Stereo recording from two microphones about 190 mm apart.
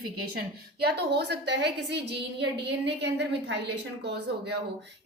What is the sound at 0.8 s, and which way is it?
A woman's voice, 60° right (ahead or behind).